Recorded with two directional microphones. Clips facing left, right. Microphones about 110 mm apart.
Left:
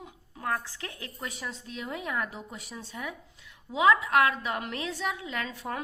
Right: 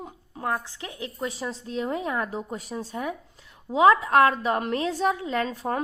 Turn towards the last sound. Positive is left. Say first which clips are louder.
# right 8 dB
turn(degrees=-40)  # may be behind; listen again after turning